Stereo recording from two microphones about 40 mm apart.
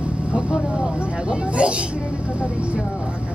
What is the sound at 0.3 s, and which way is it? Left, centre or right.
Vehicle, right.